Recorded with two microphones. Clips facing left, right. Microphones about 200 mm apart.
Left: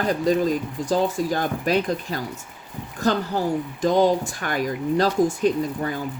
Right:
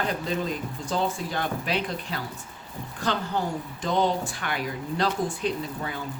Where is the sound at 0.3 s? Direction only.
40° left (ahead or behind).